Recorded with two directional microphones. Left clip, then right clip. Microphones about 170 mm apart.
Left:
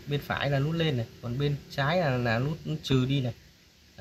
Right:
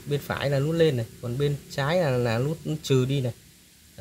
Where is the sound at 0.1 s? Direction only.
65° right (ahead or behind).